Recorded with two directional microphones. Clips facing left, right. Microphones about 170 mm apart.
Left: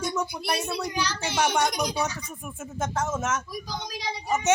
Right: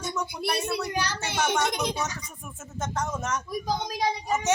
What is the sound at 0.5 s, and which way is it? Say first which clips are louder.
Speech: even; 55° right (ahead or behind).